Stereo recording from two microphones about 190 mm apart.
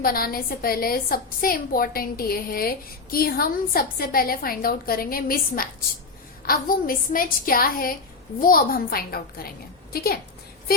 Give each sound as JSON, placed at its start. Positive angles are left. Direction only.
{"t": 0.0, "sound": "a woman's voice", "side_deg": 50}